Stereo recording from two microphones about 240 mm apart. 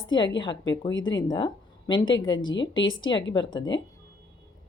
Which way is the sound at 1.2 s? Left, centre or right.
Centre.